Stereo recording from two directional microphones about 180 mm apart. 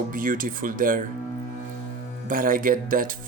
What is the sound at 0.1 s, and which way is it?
Speech, 50° right (ahead or behind).